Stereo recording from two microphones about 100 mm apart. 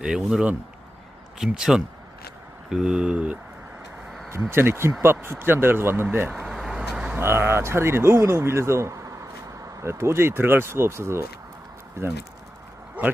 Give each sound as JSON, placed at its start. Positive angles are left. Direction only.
{"t": 0.0, "sound": "speech", "side_deg": -5}
{"t": 4.3, "sound": "speech", "side_deg": -20}
{"t": 6.4, "sound": "vehicle", "side_deg": -5}
{"t": 7.2, "sound": "speech", "side_deg": -25}